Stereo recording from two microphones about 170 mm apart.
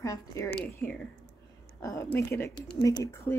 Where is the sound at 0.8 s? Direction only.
10° left (ahead or behind).